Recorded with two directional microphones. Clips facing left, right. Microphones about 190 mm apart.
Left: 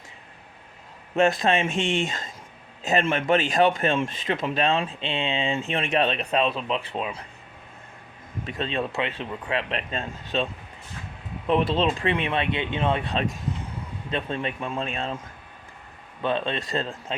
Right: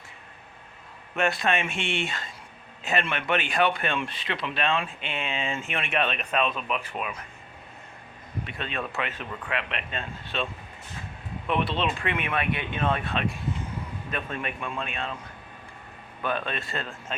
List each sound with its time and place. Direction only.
1.4 s speech: 35° left (ahead or behind)
8.4 s speech: 35° left (ahead or behind)
13.1 s speech: 40° left (ahead or behind)
14.1 s a man's voice: 25° left (ahead or behind)
16.2 s a man's voice: 25° left (ahead or behind)